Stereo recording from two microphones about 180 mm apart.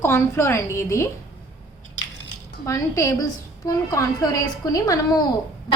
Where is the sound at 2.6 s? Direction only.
15° left (ahead or behind).